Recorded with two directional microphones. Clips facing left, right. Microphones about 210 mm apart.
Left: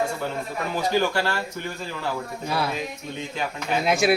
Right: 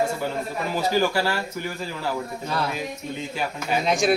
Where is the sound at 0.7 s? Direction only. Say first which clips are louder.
Right 1 dB; 5° right (ahead or behind).